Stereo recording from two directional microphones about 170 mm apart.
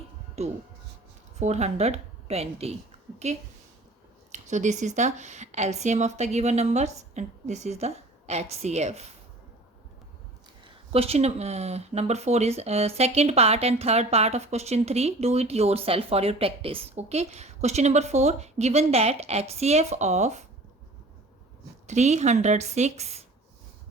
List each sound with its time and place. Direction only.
0.4 s a woman's voice: 40° right (ahead or behind)
10.6 s speech: 35° right (ahead or behind)
21.8 s speech: 40° right (ahead or behind)